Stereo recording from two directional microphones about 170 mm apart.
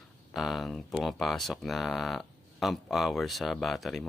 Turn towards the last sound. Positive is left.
turn(degrees=0)  # may be behind; listen again after turning